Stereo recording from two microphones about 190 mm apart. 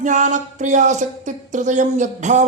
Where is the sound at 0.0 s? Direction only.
40° right (ahead or behind).